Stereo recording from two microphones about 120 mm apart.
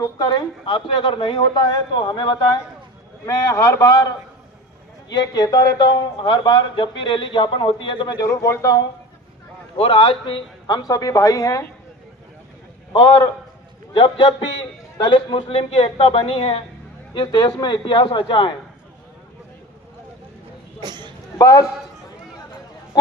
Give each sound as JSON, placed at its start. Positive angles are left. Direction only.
{"t": 0.0, "sound": "a man's voice", "side_deg": 35}
{"t": 3.2, "sound": "a man's voice", "side_deg": 25}
{"t": 5.1, "sound": "a man's voice", "side_deg": 35}
{"t": 8.3, "sound": "a man's voice", "side_deg": 25}
{"t": 9.7, "sound": "a man's voice", "side_deg": 45}
{"t": 12.9, "sound": "a man's voice", "side_deg": 40}
{"t": 15.8, "sound": "a woman's voice", "side_deg": 55}
{"t": 20.8, "sound": "speech", "side_deg": -35}
{"t": 21.3, "sound": "a man's voice", "side_deg": 30}